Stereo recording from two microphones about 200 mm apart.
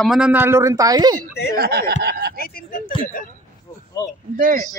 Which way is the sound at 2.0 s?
55° right (ahead or behind).